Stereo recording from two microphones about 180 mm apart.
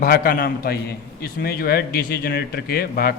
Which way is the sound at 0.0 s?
55° left (ahead or behind).